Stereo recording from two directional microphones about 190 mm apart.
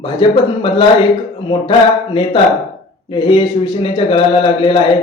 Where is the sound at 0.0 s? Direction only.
25° left (ahead or behind).